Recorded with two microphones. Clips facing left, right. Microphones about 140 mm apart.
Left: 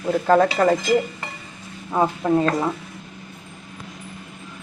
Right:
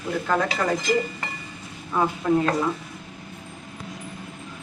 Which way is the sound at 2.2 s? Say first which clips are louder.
Left 1 dB; 35° left (ahead or behind).